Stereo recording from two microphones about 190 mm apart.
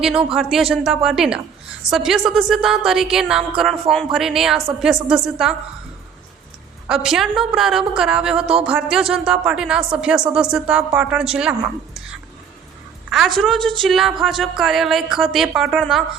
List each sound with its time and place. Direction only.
0.0 s a woman's voice: 5° right (ahead or behind)
6.8 s a woman's voice: 5° right (ahead or behind)
13.1 s a sound: centre (ahead or behind)
13.4 s a woman's voice: centre (ahead or behind)